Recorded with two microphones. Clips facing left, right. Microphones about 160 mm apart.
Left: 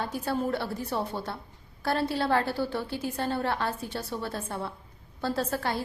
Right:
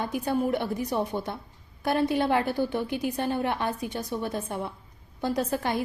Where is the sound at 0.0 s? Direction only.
15° right (ahead or behind).